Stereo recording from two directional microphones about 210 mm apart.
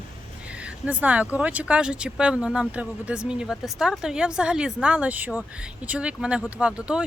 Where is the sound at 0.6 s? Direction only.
5° right (ahead or behind).